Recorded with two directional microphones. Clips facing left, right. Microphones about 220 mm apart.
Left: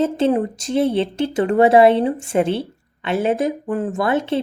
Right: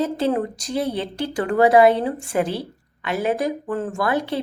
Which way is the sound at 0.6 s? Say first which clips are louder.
Left 6 dB; 25° left (ahead or behind).